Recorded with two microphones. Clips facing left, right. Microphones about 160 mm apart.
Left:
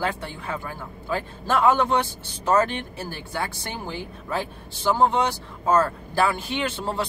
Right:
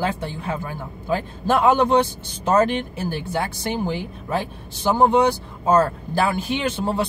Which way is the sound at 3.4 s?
20° right (ahead or behind).